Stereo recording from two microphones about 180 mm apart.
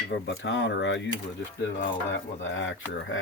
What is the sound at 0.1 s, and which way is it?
Speech, 85° left.